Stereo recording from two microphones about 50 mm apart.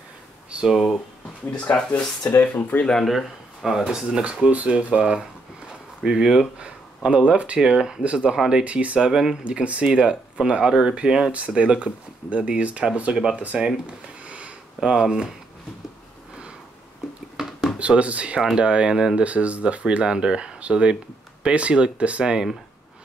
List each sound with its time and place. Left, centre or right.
0.7 s speech: centre
1.7 s speech: centre
3.1 s speech: centre; by 13.1 s right
13.1 s speech: centre
13.4 s speech: right
14.2 s sniff: right
14.9 s speech: centre
17.7 s speech: right
19.2 s speech: right